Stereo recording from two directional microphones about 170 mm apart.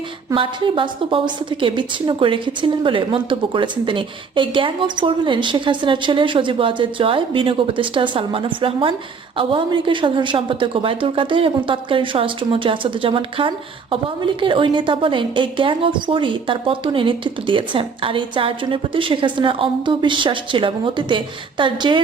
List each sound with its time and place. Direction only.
0.3 s a woman's voice: 30° right (ahead or behind)